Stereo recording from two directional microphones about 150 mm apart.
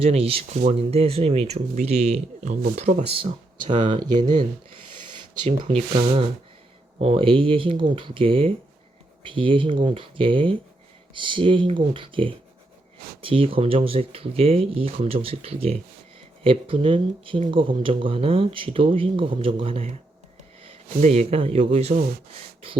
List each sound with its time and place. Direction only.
0.0 s speech: 40° right (ahead or behind)
5.5 s speech: 45° right (ahead or behind)
21.0 s speech: 45° right (ahead or behind)